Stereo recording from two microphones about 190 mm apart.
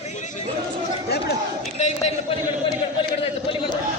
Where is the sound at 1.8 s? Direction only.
35° left (ahead or behind).